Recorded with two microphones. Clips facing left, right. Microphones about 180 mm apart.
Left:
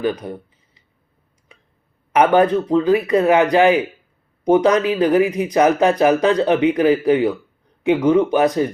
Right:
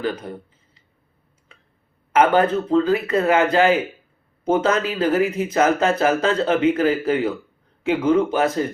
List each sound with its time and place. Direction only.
0.0 s speech: 15° left (ahead or behind)
2.1 s speech: 15° left (ahead or behind)